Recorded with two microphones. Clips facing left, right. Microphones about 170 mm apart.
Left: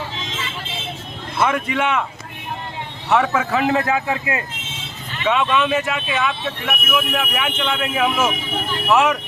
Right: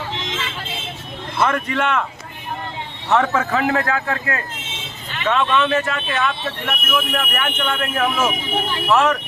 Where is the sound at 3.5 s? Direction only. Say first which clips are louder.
Left 3 dB; 20° left (ahead or behind).